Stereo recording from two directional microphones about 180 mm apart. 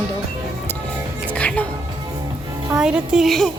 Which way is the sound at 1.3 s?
5° left (ahead or behind).